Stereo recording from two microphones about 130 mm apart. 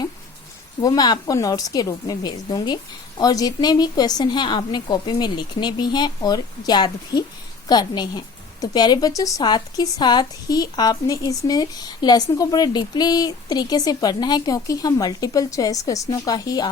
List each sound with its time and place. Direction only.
0.8 s a woman's voice: 30° left (ahead or behind)